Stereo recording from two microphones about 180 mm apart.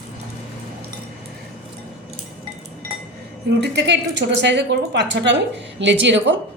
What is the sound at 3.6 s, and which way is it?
A woman's voice, 70° right (ahead or behind).